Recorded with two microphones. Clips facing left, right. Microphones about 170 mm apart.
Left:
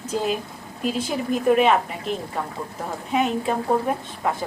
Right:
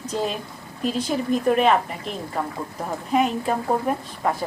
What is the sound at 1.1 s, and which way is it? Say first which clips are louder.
A woman's voice: left 1 dB; 5° left (ahead or behind).